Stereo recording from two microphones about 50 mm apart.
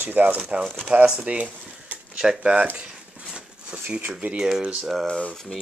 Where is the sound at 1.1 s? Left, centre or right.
Right.